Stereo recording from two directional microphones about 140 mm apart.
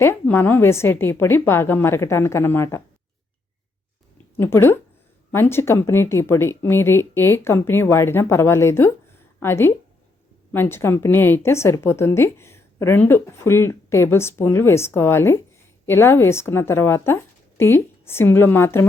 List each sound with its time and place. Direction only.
0.0 s a woman's voice: 15° left (ahead or behind)
4.4 s a woman's voice: 15° left (ahead or behind)